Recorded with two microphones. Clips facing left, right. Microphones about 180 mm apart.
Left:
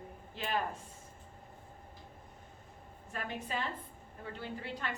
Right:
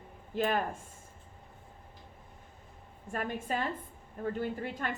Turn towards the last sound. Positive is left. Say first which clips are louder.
# right 5 dB
turn(degrees=-45)  # may be behind; listen again after turning